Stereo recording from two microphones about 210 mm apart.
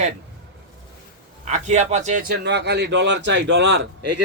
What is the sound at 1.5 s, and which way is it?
Speech, 35° right (ahead or behind).